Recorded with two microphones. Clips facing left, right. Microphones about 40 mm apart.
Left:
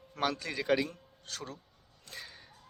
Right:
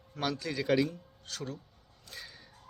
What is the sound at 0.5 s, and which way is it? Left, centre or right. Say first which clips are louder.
Speech: right 3 dB; centre.